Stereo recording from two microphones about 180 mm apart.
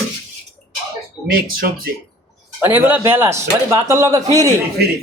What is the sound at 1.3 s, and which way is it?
Speech, 55° right (ahead or behind).